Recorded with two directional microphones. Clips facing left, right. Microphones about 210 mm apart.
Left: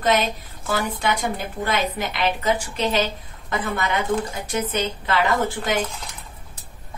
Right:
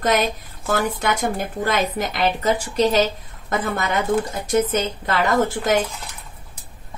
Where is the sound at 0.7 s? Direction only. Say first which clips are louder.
Right 2 dB; 50° right (ahead or behind).